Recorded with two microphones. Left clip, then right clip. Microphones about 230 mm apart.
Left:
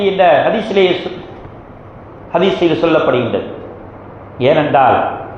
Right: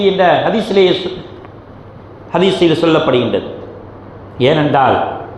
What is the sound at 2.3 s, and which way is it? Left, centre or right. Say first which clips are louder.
A man's voice: right 1 dB; right.